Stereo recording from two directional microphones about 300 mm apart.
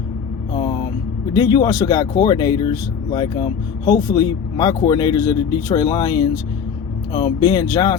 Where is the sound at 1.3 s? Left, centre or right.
Centre.